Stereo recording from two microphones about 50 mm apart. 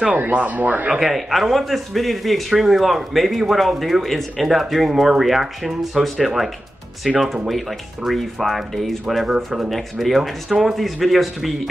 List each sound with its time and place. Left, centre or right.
0.1 s speech: right
0.8 s speech: centre
1.1 s speech: centre